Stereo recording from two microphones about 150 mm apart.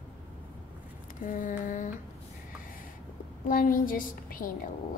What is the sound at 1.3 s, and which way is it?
Speech, 60° left (ahead or behind).